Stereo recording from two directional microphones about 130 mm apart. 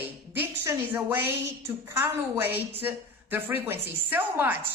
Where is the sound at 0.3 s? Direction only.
20° right (ahead or behind).